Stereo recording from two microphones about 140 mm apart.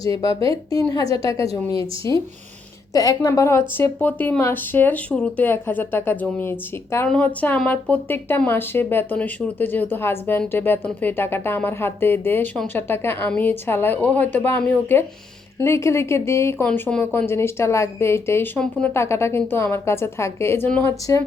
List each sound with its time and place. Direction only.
0.2 s a woman's voice: 25° left (ahead or behind)
2.9 s a woman's voice: 25° left (ahead or behind)
20.7 s speech: 10° left (ahead or behind)